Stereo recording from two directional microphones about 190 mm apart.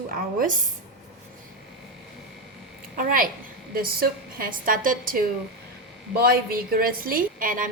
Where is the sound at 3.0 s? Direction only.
45° right (ahead or behind).